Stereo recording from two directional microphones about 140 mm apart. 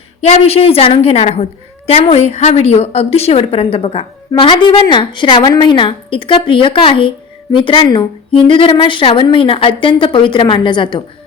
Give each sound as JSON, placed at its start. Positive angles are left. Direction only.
{"t": 0.2, "sound": "a woman's voice", "side_deg": 50}